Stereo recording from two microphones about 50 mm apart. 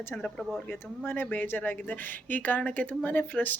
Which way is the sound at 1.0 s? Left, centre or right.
Left.